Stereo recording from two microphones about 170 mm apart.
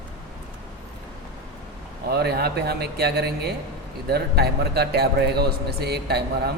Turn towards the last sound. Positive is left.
turn(degrees=-75)  # may be behind; listen again after turning